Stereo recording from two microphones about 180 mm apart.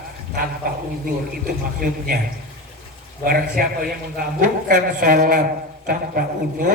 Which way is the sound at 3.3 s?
55° right (ahead or behind).